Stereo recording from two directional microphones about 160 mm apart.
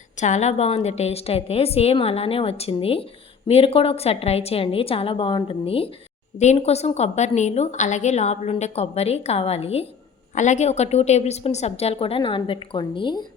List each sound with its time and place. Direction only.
0.2 s a woman's voice: 45° left (ahead or behind); by 13.2 s 30° left (ahead or behind)